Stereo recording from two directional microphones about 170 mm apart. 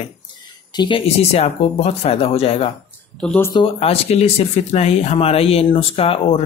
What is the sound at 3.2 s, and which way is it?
Speech, 10° left (ahead or behind).